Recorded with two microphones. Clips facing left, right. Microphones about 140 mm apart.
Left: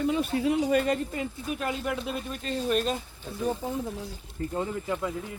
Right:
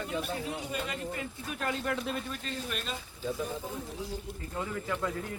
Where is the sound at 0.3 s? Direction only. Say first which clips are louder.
Left 12 dB; 85° left.